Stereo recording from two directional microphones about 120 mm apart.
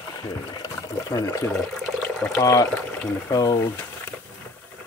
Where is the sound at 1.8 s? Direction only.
10° left (ahead or behind).